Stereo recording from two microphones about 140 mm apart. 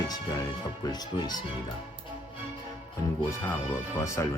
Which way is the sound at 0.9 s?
30° left (ahead or behind).